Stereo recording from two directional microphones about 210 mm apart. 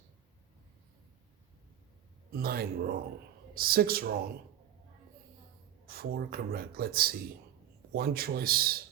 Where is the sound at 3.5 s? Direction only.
45° right (ahead or behind).